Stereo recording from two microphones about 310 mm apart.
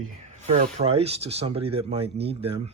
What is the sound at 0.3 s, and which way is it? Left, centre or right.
Speech, right.